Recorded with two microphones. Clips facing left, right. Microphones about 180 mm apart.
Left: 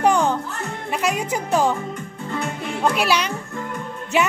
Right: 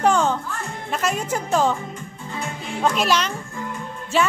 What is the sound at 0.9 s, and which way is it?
Speech, 10° left (ahead or behind).